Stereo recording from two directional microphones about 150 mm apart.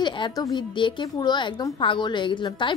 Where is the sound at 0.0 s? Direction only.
30° left (ahead or behind).